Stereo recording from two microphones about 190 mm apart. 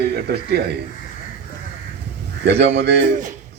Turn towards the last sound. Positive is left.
turn(degrees=-45)  # may be behind; listen again after turning